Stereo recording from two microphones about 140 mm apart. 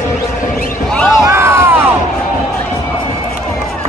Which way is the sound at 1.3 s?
20° right (ahead or behind).